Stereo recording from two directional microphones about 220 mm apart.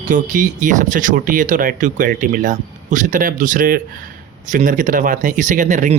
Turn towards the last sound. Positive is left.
turn(degrees=-35)  # may be behind; listen again after turning